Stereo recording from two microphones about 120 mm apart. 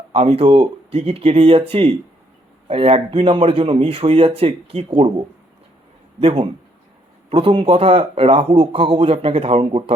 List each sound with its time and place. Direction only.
0.1 s speech: 55° right (ahead or behind)
6.1 s speech: 50° right (ahead or behind)